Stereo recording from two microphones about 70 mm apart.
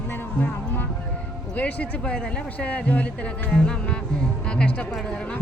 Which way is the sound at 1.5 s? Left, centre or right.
Left.